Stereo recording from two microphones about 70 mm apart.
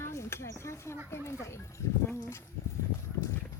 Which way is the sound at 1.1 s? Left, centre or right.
Left.